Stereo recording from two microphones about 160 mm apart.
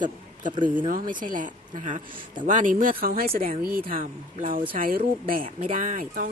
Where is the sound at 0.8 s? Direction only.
55° right (ahead or behind).